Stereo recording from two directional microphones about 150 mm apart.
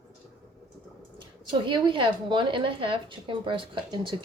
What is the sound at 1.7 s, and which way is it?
A woman's voice, 35° right (ahead or behind).